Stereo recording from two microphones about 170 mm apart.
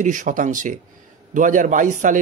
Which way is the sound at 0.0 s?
50° right (ahead or behind).